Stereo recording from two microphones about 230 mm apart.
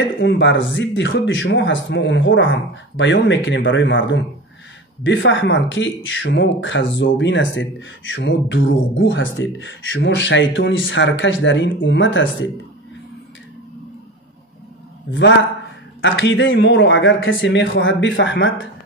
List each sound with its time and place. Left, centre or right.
0.2 s speech: left
15.0 s speech: left